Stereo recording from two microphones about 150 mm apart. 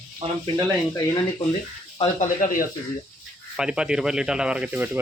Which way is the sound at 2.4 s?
70° left (ahead or behind).